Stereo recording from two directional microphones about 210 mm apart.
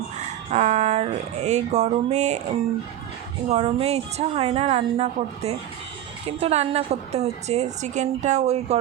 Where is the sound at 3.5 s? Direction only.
30° right (ahead or behind).